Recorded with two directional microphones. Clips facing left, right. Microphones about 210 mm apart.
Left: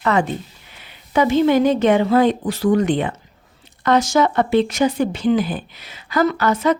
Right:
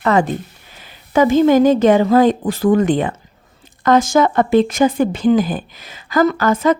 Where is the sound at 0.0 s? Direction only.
40° right (ahead or behind).